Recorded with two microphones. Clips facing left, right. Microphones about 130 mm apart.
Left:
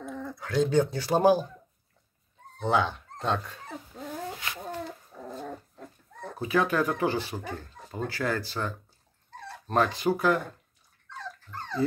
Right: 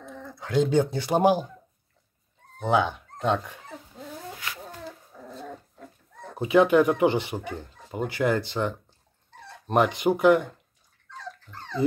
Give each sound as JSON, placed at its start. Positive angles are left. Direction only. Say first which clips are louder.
{"t": 0.4, "sound": "speech", "louder": "right 2 dB", "side_deg": -20}
{"t": 2.6, "sound": "speech", "louder": "right 2 dB", "side_deg": -15}
{"t": 6.3, "sound": "speech", "louder": "right 7 dB", "side_deg": -20}